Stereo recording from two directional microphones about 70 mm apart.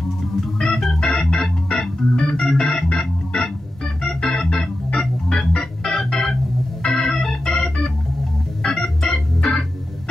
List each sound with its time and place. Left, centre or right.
0.6 s organ: centre